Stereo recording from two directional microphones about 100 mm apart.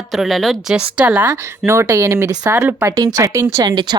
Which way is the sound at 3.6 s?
45° right (ahead or behind).